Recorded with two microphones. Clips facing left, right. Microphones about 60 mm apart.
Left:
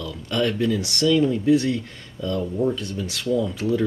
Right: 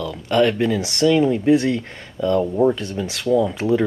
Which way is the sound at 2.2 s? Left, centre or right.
Right.